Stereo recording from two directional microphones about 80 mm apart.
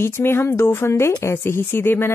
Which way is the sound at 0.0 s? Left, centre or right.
Left.